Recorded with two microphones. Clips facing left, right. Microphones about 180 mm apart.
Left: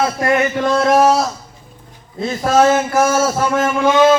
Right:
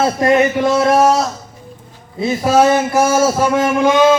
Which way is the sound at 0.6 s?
5° right (ahead or behind).